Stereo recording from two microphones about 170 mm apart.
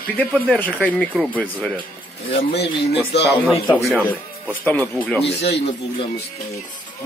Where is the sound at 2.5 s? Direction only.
75° left (ahead or behind).